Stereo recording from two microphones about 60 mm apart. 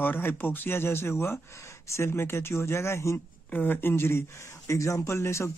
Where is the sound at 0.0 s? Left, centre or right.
Left.